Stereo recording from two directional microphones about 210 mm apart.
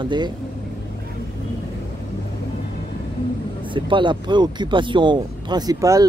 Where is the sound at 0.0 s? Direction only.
20° right (ahead or behind).